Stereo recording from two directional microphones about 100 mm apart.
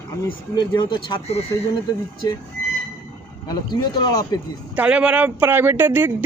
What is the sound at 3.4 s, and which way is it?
Speech, 45° left (ahead or behind).